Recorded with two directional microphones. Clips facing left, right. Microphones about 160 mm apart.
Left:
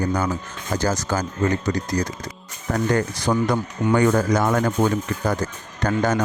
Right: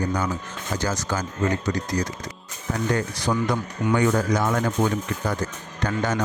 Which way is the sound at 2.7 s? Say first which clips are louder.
Left 3 dB; 50° left (ahead or behind).